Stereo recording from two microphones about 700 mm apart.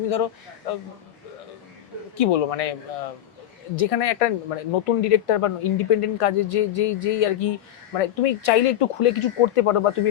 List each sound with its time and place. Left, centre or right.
2.1 s speech: left
3.8 s speech: left